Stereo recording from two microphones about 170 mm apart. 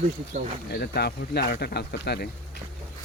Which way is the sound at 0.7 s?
70° left (ahead or behind).